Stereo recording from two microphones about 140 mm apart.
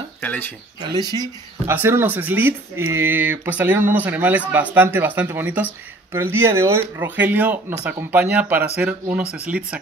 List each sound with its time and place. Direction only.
0.2 s speech: 10° left (ahead or behind)
0.9 s speech: 25° right (ahead or behind)
1.7 s speech: 15° right (ahead or behind)